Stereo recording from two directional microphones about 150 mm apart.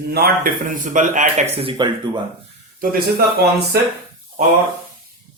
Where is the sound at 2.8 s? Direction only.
80° right.